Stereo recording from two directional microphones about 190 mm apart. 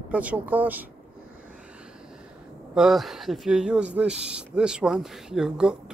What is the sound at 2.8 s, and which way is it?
Speech, centre (ahead or behind).